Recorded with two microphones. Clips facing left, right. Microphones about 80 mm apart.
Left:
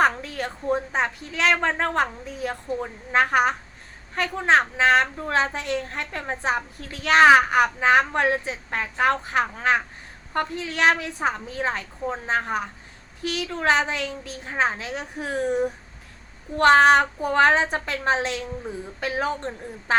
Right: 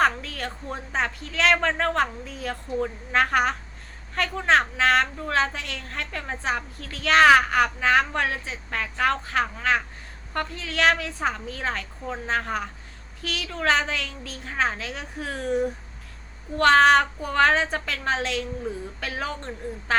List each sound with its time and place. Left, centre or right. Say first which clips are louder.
0.0 s a woman's voice: left 2 dB; centre